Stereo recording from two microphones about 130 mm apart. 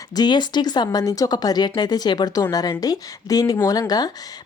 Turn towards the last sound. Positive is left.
turn(degrees=30)  # may be behind; listen again after turning